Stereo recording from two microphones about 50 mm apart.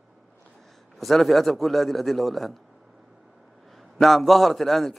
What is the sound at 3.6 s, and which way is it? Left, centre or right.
A man's voice, centre.